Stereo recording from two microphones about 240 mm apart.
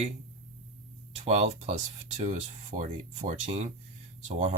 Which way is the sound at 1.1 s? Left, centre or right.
Right.